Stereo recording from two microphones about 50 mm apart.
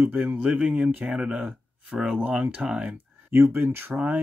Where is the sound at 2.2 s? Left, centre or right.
Right.